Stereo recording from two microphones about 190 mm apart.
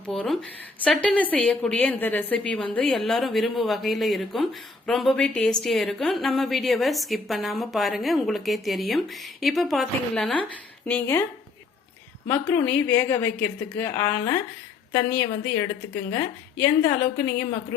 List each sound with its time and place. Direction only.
0.0 s a woman's voice: 5° left (ahead or behind)
12.3 s a woman's voice: 10° left (ahead or behind)
16.6 s a woman's voice: 10° left (ahead or behind)